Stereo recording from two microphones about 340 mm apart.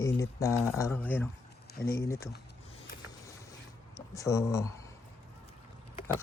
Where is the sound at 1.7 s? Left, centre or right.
Left.